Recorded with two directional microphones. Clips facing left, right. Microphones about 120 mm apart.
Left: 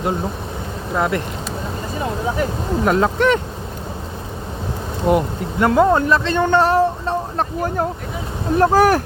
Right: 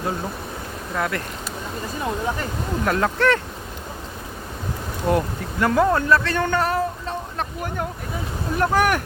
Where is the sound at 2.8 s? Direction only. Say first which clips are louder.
Left 4 dB; 20° left (ahead or behind).